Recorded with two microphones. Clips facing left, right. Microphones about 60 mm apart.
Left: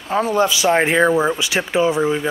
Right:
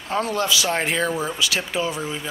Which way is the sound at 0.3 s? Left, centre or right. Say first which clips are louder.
Left 9 dB; left.